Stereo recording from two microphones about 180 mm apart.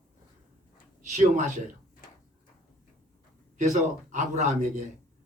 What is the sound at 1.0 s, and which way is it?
Speech, 45° right (ahead or behind).